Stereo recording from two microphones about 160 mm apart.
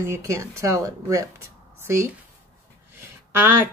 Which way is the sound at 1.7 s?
15° right (ahead or behind).